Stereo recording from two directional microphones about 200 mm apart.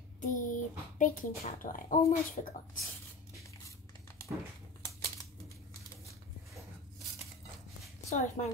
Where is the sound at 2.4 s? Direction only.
30° left (ahead or behind).